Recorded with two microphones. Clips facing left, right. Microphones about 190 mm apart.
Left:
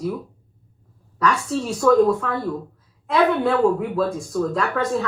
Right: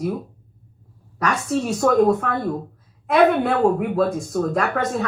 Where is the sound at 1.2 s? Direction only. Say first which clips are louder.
Even; 20° right (ahead or behind).